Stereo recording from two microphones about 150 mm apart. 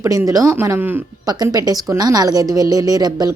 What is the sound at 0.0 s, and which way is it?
Speech, 20° right (ahead or behind).